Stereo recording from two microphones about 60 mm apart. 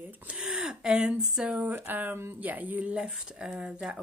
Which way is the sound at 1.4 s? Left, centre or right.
Right.